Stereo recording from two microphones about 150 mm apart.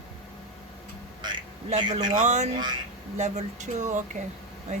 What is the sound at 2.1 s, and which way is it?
Speech, 50° right (ahead or behind).